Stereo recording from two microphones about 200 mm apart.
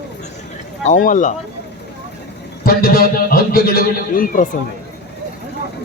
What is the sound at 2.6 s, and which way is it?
A man's voice, 50° left (ahead or behind).